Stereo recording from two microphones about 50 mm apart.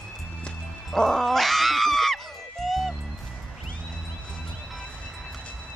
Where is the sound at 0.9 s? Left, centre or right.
Centre.